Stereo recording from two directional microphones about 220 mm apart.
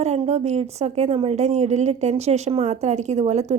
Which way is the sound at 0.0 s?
30° right (ahead or behind).